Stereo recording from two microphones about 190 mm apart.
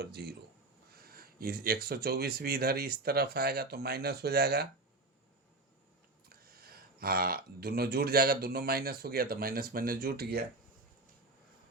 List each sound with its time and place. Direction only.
0.0 s speech: 60° right (ahead or behind)
6.2 s speech: 55° right (ahead or behind)